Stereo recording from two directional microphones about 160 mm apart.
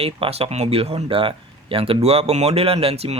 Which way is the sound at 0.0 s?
40° right (ahead or behind).